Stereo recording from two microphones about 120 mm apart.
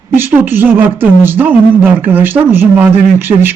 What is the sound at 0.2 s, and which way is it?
A woman's voice, 15° right (ahead or behind).